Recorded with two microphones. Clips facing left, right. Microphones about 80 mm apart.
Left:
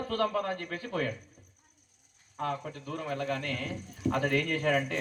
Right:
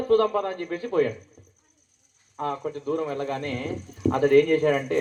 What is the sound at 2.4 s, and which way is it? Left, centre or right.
Speech, right.